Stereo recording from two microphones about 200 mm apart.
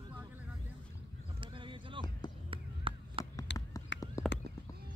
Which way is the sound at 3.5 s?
60° left (ahead or behind).